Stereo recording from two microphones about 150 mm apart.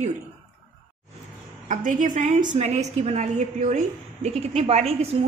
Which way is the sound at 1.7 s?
60° right (ahead or behind).